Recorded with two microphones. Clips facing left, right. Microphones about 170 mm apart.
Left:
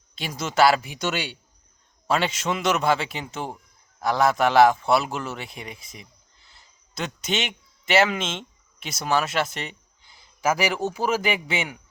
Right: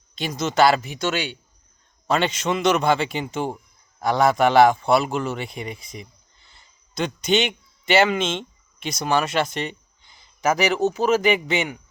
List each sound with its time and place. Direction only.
0.2 s a man's voice: 5° left (ahead or behind)